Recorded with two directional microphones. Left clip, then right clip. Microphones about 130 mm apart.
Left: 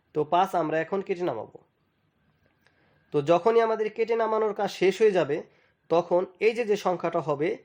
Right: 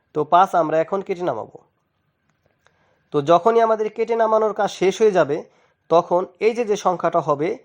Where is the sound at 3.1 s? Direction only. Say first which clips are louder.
Right 6 dB; 35° right (ahead or behind).